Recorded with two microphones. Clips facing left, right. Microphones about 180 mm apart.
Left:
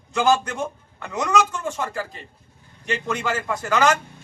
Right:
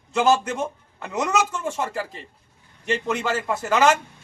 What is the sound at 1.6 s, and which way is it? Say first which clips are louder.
Speech: right 1 dB; 25° right (ahead or behind).